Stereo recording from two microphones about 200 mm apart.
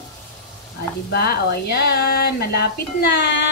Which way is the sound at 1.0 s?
50° left (ahead or behind).